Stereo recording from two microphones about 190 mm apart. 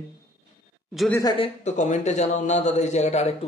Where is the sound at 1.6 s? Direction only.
35° left (ahead or behind).